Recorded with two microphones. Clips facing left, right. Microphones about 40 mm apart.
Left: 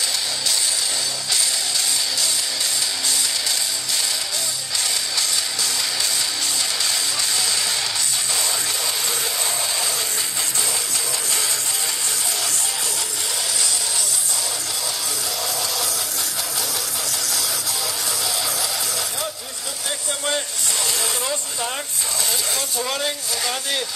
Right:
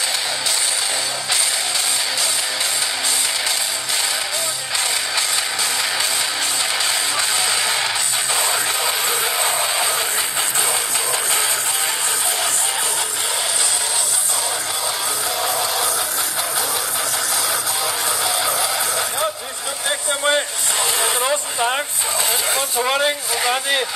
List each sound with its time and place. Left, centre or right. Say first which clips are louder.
7.2 s music: right 4 dB; right
9.4 s music: right 5 dB; right
18.2 s music: right 5 dB; right
20.1 s vehicle: right 6 dB; right
21.0 s a sound: right 6 dB; right